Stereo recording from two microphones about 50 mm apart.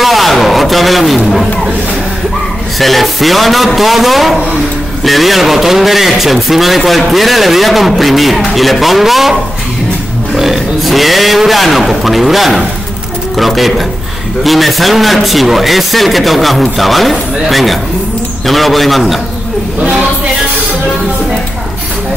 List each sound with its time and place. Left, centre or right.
0.0 s a man's voice: centre
2.8 s a man's voice: centre